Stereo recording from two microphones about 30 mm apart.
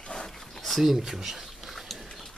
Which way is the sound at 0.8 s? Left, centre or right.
Centre.